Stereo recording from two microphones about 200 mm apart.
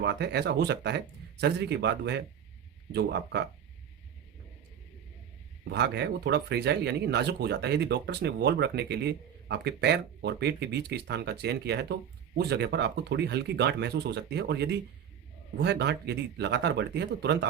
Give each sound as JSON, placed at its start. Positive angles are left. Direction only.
{"t": 0.0, "sound": "speech", "side_deg": -55}
{"t": 5.6, "sound": "speech", "side_deg": -60}